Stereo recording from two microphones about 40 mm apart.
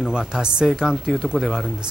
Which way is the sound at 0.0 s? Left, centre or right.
Centre.